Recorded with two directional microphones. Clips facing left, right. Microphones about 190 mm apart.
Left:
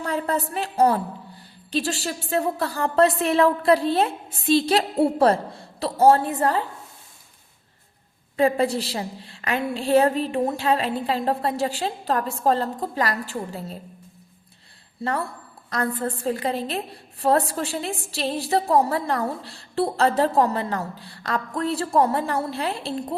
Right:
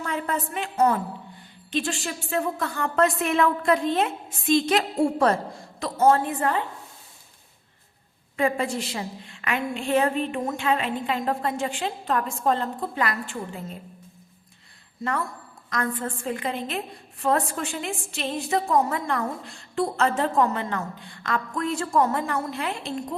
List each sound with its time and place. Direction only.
0.0 s a woman's voice: 35° left (ahead or behind)
8.4 s a woman's voice: 35° left (ahead or behind)
15.0 s a woman's voice: 30° left (ahead or behind)